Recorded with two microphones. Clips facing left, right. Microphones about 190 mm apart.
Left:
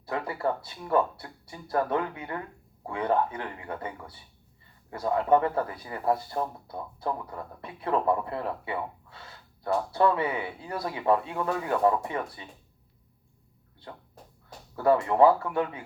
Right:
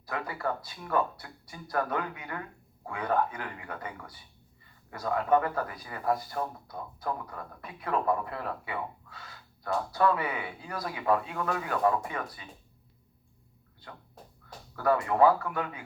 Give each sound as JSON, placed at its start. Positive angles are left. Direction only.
{"t": 0.0, "sound": "speech", "side_deg": 25}
{"t": 14.8, "sound": "speech", "side_deg": 25}